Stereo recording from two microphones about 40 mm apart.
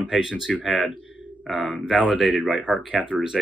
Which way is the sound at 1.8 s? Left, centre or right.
Centre.